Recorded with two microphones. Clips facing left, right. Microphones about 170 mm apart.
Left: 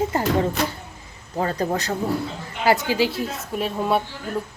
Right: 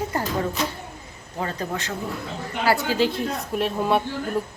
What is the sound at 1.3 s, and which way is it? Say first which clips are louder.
Speech: left 5 dB; 35° left (ahead or behind).